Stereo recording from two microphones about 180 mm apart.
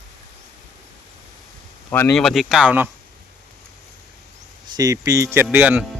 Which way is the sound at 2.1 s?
Centre (ahead or behind).